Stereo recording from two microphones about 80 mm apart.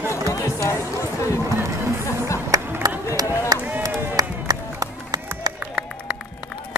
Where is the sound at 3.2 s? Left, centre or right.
Right.